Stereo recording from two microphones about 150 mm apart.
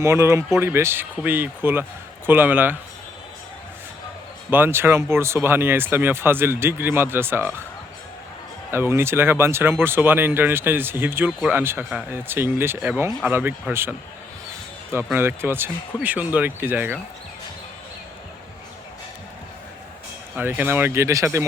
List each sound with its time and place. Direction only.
0.0 s speech: 15° right (ahead or behind)
4.5 s speech: 15° right (ahead or behind)
8.7 s speech: 15° right (ahead or behind)
11.3 s speech: centre (ahead or behind)
11.5 s speech: 15° right (ahead or behind)
14.9 s speech: 15° right (ahead or behind)
20.3 s speech: 10° right (ahead or behind)